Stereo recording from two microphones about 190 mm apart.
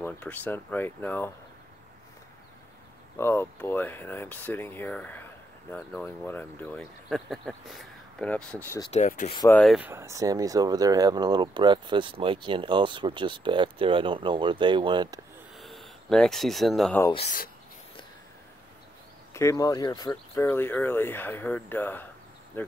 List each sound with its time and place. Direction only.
0.0 s speech: 10° left (ahead or behind)
3.2 s speech: 10° left (ahead or behind)
8.9 s rub: 40° left (ahead or behind)
9.5 s speech: 5° left (ahead or behind)
9.8 s speech: 10° right (ahead or behind)
15.5 s speech: centre (ahead or behind)
19.3 s speech: 15° left (ahead or behind)